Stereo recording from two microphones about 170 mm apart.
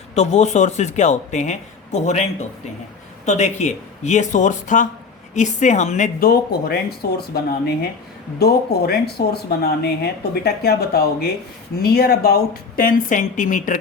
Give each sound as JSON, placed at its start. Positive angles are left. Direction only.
{"t": 0.1, "sound": "speech", "side_deg": 40}
{"t": 3.2, "sound": "speech", "side_deg": 45}
{"t": 6.1, "sound": "a woman's voice", "side_deg": 60}